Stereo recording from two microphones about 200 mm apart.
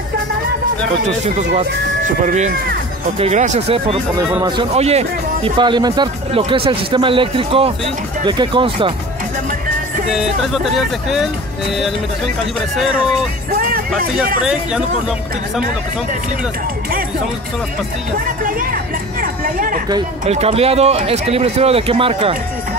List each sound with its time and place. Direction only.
2.2 s speech: 35° right (ahead or behind)
4.3 s speech: 20° right (ahead or behind)
10.1 s speech: centre (ahead or behind)
13.5 s music: 45° right (ahead or behind)
14.4 s speech: 5° right (ahead or behind)
18.2 s speech: 45° right (ahead or behind)
20.2 s speech: 30° right (ahead or behind)